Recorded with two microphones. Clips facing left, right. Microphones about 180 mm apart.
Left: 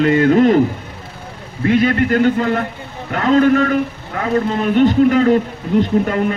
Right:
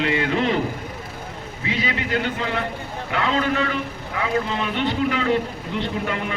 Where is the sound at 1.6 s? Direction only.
50° left (ahead or behind).